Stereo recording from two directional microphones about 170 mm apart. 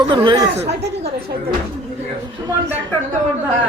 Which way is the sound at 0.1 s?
30° right (ahead or behind).